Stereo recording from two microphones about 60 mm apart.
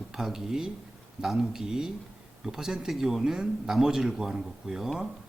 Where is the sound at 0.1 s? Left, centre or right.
Centre.